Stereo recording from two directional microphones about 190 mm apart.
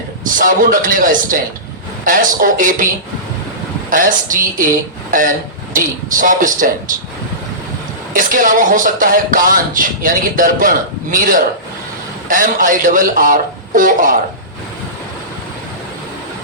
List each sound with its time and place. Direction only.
0.3 s speech: 45° right (ahead or behind)
5.7 s speech: 45° right (ahead or behind)
8.1 s speech: 45° right (ahead or behind)